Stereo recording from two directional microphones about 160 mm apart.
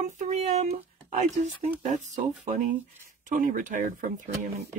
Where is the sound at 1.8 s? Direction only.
45° right (ahead or behind).